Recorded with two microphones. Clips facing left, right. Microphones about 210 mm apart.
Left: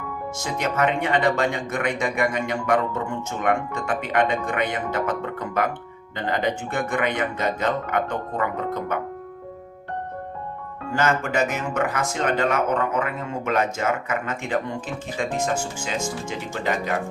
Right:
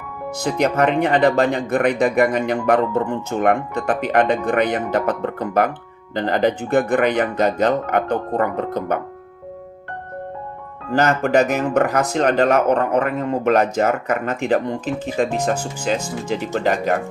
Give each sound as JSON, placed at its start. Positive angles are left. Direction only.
{"t": 0.3, "sound": "speech", "side_deg": -35}
{"t": 10.9, "sound": "speech", "side_deg": -40}